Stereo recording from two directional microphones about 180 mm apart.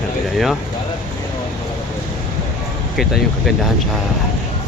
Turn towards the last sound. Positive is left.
turn(degrees=0)  # may be behind; listen again after turning